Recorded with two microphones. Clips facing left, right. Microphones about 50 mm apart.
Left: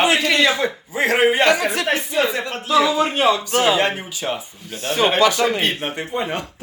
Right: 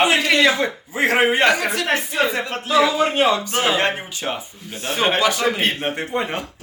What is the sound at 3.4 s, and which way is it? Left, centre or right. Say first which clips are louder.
Speech: left 2 dB; right.